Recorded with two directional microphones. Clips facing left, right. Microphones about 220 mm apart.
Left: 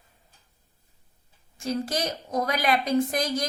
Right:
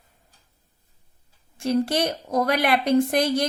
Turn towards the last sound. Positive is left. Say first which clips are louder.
# right 5 dB
turn(degrees=-65)  # may be behind; listen again after turning